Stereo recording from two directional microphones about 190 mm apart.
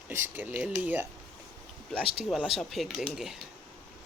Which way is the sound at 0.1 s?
10° right (ahead or behind).